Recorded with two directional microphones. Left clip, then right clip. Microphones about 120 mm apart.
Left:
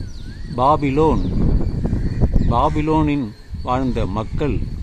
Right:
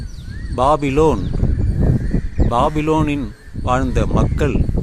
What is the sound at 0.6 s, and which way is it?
Speech, 20° right (ahead or behind).